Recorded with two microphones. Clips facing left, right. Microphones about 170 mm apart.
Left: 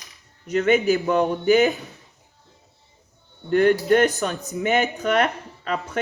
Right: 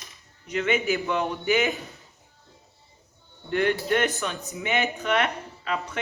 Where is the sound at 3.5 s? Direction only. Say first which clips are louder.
Left 7 dB; 40° left (ahead or behind).